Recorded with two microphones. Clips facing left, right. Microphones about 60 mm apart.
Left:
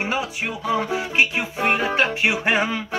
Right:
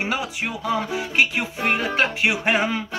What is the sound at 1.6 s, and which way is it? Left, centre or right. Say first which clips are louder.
Music: left 2 dB; left.